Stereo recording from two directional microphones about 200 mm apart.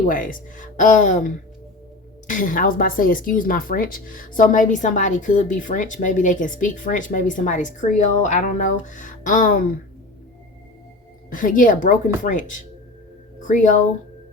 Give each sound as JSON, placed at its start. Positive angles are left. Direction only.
{"t": 0.1, "sound": "speech", "side_deg": 45}
{"t": 11.3, "sound": "speech", "side_deg": 40}